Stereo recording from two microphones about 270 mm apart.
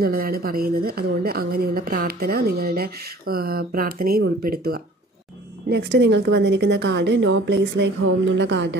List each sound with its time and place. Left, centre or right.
0.0 s speech: right